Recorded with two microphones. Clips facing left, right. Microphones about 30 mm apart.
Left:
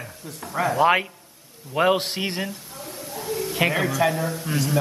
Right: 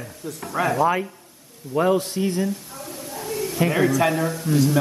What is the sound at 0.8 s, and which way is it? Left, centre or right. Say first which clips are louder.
A man's voice: left 2 dB; left.